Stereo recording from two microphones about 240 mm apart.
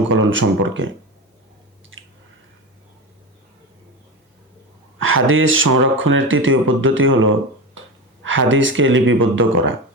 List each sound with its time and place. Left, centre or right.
0.1 s speech: right
1.9 s drip: right
4.9 s speech: right